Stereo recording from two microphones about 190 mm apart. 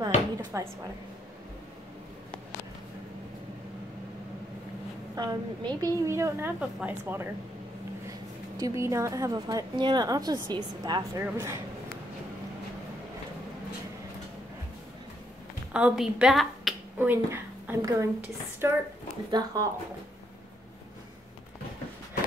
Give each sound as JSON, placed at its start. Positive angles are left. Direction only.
{"t": 0.5, "sound": "a woman's voice", "side_deg": -15}
{"t": 5.1, "sound": "a woman's voice", "side_deg": -20}
{"t": 8.5, "sound": "a woman's voice", "side_deg": -15}
{"t": 15.7, "sound": "speech", "side_deg": -5}
{"t": 17.1, "sound": "a woman's voice", "side_deg": -10}